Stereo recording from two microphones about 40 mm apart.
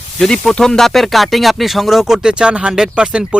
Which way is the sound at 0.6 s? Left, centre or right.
Centre.